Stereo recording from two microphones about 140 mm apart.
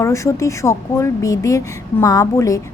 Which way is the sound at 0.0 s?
20° left (ahead or behind).